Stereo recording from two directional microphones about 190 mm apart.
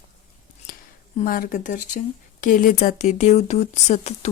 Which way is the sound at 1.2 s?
45° left (ahead or behind).